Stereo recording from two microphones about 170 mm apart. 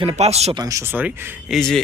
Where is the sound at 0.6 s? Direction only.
20° right (ahead or behind).